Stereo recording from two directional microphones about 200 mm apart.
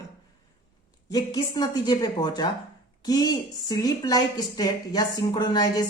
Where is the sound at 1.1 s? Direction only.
20° left (ahead or behind).